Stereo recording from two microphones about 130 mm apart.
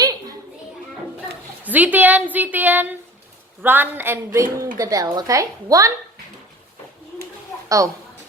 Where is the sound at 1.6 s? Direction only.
10° right (ahead or behind).